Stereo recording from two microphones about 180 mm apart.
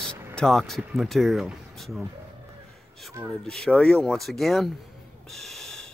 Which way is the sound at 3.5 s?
5° left (ahead or behind).